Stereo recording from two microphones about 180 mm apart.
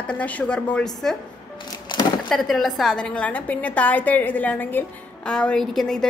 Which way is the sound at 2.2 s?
Centre (ahead or behind).